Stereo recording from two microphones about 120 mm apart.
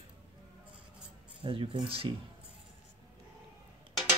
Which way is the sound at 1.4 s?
45° right (ahead or behind).